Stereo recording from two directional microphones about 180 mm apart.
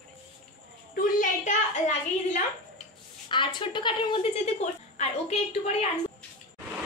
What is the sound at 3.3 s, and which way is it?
A woman's voice, 25° left (ahead or behind).